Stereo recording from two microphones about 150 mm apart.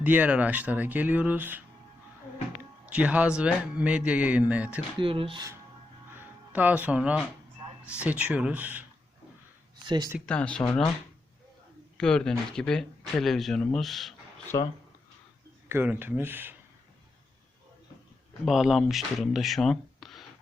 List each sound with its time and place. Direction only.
0.0 s speech: 10° right (ahead or behind)
2.9 s speech: 10° right (ahead or behind)
4.9 s speech: 35° right (ahead or behind)
6.1 s speech: 10° right (ahead or behind)
9.8 s speech: 30° right (ahead or behind)
10.2 s speech: 5° left (ahead or behind)
11.9 s speech: 5° left (ahead or behind)
14.5 s speech: 25° left (ahead or behind)
15.7 s speech: 15° right (ahead or behind)
18.4 s speech: centre (ahead or behind)